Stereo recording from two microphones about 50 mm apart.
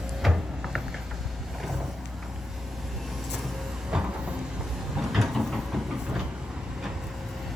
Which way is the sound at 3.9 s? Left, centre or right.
Right.